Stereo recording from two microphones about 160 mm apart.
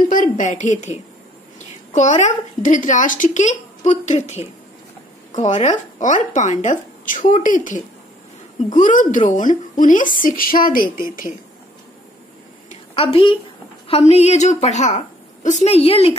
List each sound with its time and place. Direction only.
0.1 s a woman's voice: 55° left (ahead or behind)
2.0 s a woman's voice: 50° left (ahead or behind)
12.6 s a sound: 40° left (ahead or behind)
13.8 s a woman's voice: 40° left (ahead or behind)